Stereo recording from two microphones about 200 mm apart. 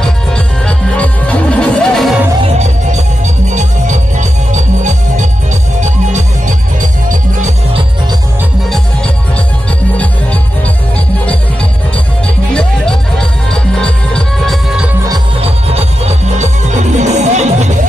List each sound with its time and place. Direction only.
0.7 s music: 5° left (ahead or behind)
2.4 s music: 35° right (ahead or behind)
12.5 s music: 5° left (ahead or behind)
15.0 s music: 30° right (ahead or behind)